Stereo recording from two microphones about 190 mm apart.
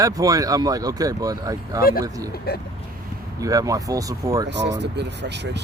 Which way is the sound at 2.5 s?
55° left (ahead or behind).